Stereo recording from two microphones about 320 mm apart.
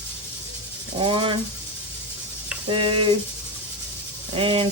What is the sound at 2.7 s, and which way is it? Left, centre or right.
Speech, centre.